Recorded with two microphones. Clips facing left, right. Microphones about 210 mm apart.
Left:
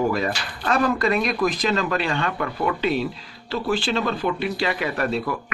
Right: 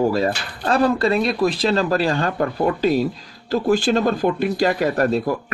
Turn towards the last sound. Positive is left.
turn(degrees=-40)  # may be behind; listen again after turning